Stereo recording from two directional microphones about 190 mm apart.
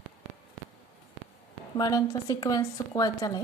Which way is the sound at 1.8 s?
20° left (ahead or behind).